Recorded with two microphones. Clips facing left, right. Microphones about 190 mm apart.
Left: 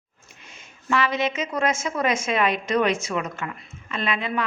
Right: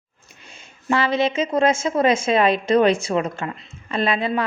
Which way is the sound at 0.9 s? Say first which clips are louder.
Right 4 dB; 30° right (ahead or behind).